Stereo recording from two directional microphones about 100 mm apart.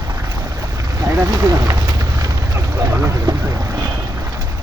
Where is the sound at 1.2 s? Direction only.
35° right (ahead or behind).